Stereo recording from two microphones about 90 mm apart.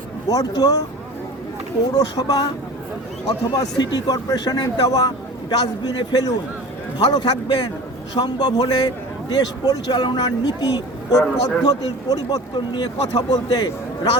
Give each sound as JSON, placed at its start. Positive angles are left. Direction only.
{"t": 0.3, "sound": "a man's voice", "side_deg": 45}
{"t": 2.0, "sound": "a man's voice", "side_deg": 45}